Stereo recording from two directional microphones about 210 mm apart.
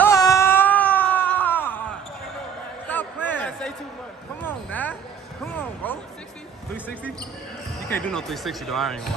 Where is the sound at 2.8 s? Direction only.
10° left (ahead or behind).